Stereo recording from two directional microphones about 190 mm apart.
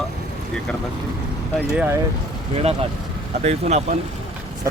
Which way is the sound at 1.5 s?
5° right (ahead or behind).